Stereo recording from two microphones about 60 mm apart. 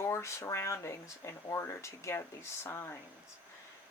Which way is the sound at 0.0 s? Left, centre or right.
Left.